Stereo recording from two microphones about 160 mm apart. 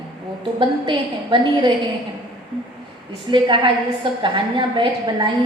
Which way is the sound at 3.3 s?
30° right (ahead or behind).